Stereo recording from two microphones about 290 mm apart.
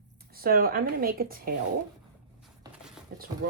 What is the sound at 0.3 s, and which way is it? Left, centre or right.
Speech, right.